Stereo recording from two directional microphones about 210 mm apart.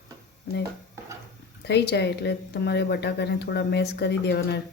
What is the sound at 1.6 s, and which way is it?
Speech, 55° left (ahead or behind).